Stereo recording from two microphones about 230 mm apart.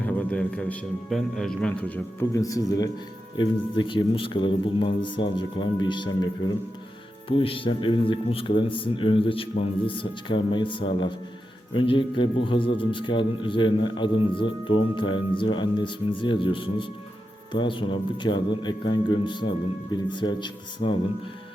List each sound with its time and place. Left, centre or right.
0.0 s a man's voice: centre
2.3 s a man's voice: centre